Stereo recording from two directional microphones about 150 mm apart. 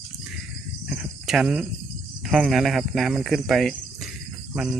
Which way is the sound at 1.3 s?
5° right (ahead or behind).